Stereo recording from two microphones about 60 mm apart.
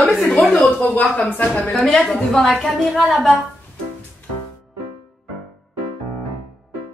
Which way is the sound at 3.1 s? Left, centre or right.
Centre.